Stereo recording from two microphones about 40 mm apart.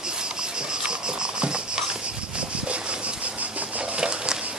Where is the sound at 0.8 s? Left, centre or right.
Right.